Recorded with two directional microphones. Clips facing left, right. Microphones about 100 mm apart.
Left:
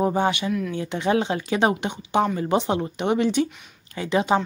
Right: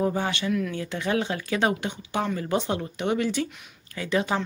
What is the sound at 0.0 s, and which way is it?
A woman's voice, 25° left (ahead or behind).